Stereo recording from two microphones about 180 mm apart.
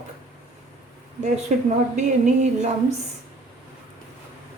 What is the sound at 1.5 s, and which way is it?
Speech, 45° right (ahead or behind).